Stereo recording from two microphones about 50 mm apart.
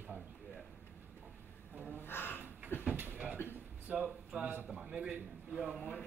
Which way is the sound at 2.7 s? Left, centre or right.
Left.